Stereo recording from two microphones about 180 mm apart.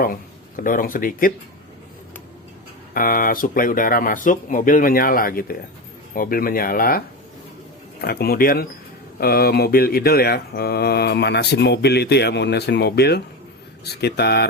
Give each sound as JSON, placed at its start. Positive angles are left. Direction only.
{"t": 0.0, "sound": "speech", "side_deg": 50}
{"t": 2.9, "sound": "speech", "side_deg": 50}
{"t": 8.0, "sound": "speech", "side_deg": 60}